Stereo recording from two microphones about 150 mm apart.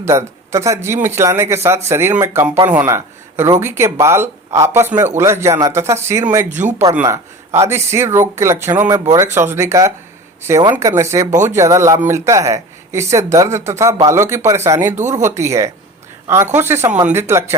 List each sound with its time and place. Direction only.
0.0 s a man's voice: 20° right (ahead or behind)
6.5 s speech: 55° right (ahead or behind)
7.6 s speech: 20° right (ahead or behind)
11.3 s speech: 55° right (ahead or behind)
11.5 s speech: 20° right (ahead or behind)